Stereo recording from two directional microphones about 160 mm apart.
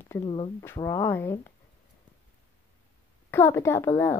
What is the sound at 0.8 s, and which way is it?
Speech, 20° left (ahead or behind).